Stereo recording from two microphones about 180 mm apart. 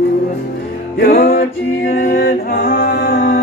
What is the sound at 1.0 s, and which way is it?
Music, 55° left (ahead or behind).